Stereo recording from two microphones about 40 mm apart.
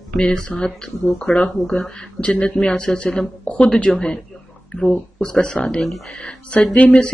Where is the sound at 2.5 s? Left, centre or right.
Centre.